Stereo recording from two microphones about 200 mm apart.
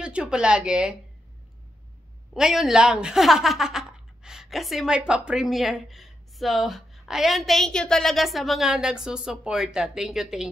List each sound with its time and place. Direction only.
0.0 s a woman's voice: 5° right (ahead or behind)
2.3 s a woman's voice: centre (ahead or behind)